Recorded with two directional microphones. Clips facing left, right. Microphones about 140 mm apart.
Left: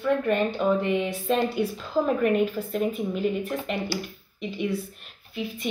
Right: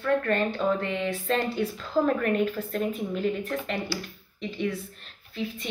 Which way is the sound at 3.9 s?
20° left (ahead or behind).